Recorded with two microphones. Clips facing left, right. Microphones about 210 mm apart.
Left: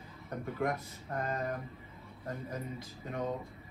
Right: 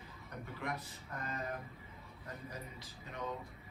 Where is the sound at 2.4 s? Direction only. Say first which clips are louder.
Left 7 dB; 50° left (ahead or behind).